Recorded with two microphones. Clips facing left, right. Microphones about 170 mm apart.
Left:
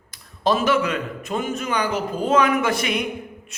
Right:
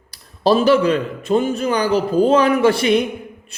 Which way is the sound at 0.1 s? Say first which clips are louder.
Right 5 dB; 35° right (ahead or behind).